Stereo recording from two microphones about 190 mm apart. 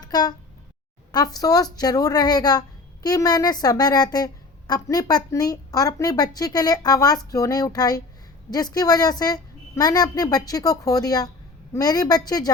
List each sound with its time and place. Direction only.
0.0 s speech: 20° left (ahead or behind)